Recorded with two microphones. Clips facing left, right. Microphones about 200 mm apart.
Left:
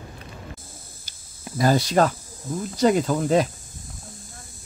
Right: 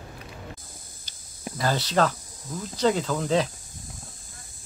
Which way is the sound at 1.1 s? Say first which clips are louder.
Even; 5° left (ahead or behind).